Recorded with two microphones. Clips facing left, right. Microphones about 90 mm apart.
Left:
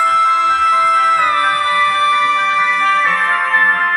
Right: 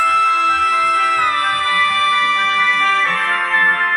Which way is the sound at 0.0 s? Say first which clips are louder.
Left 2 dB; 25° left (ahead or behind).